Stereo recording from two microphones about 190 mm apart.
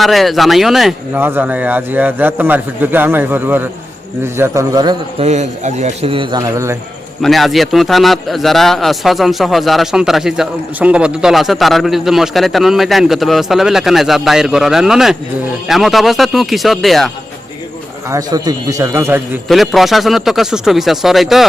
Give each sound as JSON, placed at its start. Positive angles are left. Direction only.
{"t": 0.0, "sound": "speech", "side_deg": 0}
{"t": 5.2, "sound": "a man's voice", "side_deg": -35}
{"t": 7.2, "sound": "a man's voice", "side_deg": 0}
{"t": 18.1, "sound": "speech", "side_deg": -20}
{"t": 19.5, "sound": "a man's voice", "side_deg": 0}